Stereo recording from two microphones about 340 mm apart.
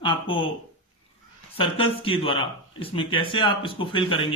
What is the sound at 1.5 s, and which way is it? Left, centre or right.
Speech, centre.